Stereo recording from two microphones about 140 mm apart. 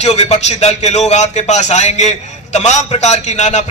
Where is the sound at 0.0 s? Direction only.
50° left (ahead or behind).